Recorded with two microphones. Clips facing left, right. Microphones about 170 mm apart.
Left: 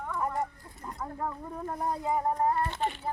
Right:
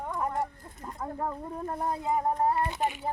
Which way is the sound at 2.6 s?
15° right (ahead or behind).